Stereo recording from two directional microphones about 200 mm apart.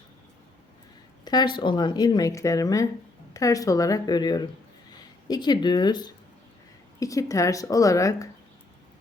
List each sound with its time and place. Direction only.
1.2 s a woman's voice: 20° left (ahead or behind)